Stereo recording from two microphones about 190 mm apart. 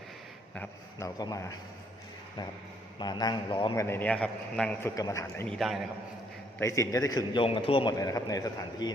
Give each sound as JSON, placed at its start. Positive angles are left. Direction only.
{"t": 0.5, "sound": "a man's voice", "side_deg": 10}
{"t": 3.0, "sound": "a man's voice", "side_deg": 20}
{"t": 3.8, "sound": "a man's voice", "side_deg": 10}
{"t": 4.9, "sound": "a man's voice", "side_deg": 15}
{"t": 5.5, "sound": "a man's voice", "side_deg": 0}
{"t": 6.6, "sound": "a man's voice", "side_deg": 15}